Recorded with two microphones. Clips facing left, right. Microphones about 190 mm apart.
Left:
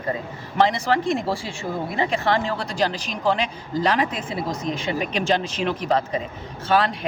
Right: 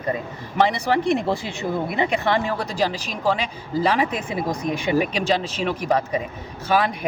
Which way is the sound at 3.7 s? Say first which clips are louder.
Right 1 dB; 10° right (ahead or behind).